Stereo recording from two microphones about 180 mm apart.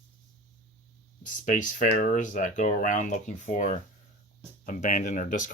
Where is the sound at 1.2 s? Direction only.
45° left (ahead or behind).